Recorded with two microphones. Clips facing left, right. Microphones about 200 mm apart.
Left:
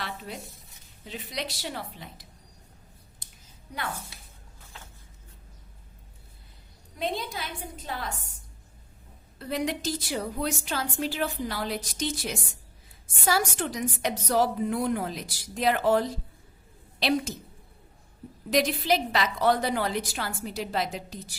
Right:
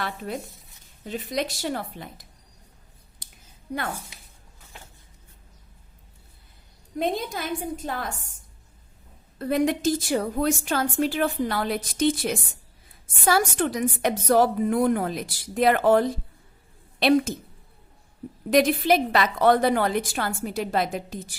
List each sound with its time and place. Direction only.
0.3 s a woman's voice: 55° right (ahead or behind)
7.0 s a woman's voice: 50° right (ahead or behind)
9.4 s a woman's voice: 50° right (ahead or behind)
18.5 s a woman's voice: 55° right (ahead or behind)